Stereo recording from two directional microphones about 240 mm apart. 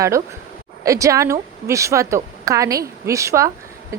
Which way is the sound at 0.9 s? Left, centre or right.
Centre.